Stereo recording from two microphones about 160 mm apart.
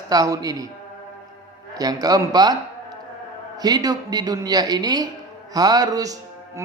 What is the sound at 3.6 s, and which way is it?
A man's voice, 25° right (ahead or behind).